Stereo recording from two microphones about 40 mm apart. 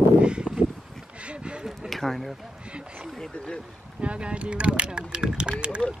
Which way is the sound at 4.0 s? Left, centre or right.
Right.